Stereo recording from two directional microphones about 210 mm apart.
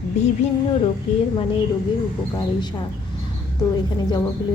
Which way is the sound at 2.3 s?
20° left (ahead or behind).